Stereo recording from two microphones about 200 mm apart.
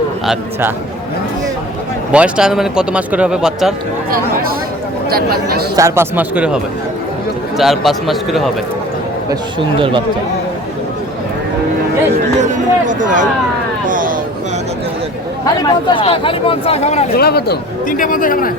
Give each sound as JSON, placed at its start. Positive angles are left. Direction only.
{"t": 2.1, "sound": "speech", "side_deg": -5}
{"t": 5.0, "sound": "speech", "side_deg": -50}
{"t": 5.7, "sound": "speech", "side_deg": -15}
{"t": 12.4, "sound": "a sound", "side_deg": -40}
{"t": 15.6, "sound": "speech", "side_deg": 25}
{"t": 17.2, "sound": "speech", "side_deg": 50}